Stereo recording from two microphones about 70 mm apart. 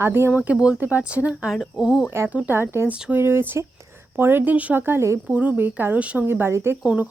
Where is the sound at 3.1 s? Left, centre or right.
Right.